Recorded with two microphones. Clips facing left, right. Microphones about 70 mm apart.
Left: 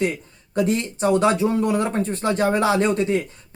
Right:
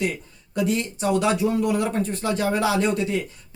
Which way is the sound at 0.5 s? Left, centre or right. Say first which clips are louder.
Left 2 dB; left.